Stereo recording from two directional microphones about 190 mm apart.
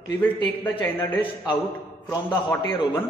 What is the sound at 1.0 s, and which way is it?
Speech, 20° left (ahead or behind).